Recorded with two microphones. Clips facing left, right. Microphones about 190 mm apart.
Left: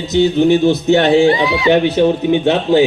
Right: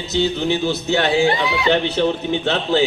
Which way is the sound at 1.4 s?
60° left (ahead or behind).